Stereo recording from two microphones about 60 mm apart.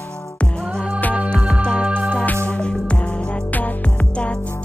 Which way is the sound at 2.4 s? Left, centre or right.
Centre.